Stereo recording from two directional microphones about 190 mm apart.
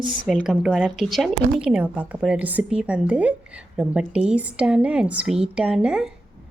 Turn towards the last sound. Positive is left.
turn(degrees=-5)  # may be behind; listen again after turning